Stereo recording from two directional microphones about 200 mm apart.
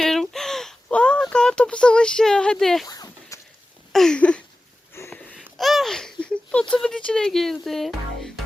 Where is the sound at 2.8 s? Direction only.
20° left (ahead or behind).